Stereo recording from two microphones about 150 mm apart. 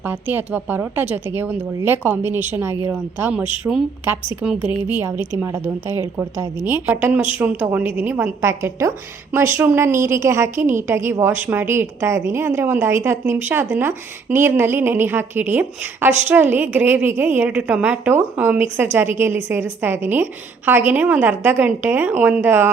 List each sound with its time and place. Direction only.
0.0 s a woman's voice: 15° right (ahead or behind)